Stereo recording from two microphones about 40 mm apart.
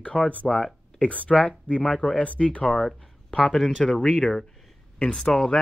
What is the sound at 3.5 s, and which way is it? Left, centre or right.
Speech, centre.